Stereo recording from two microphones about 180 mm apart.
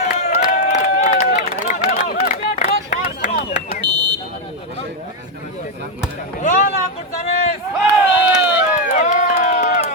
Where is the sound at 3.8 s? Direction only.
75° right (ahead or behind).